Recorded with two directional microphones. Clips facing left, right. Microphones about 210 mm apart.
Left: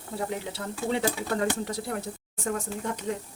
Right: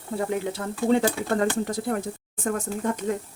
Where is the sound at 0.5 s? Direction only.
50° right (ahead or behind).